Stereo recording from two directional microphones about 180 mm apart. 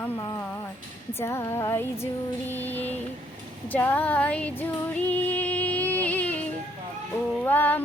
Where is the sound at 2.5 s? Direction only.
10° left (ahead or behind).